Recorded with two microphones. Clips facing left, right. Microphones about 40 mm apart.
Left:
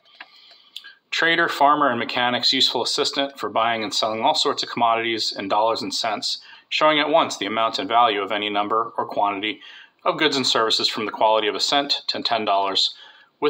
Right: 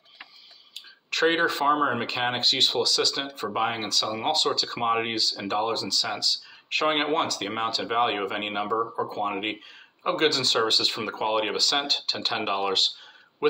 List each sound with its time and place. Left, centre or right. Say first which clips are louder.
0.7 s speech: left 4 dB; left
8.9 s speech: left 5 dB; left
9.2 s speech: left 8 dB; left
9.7 s speech: left 5 dB; left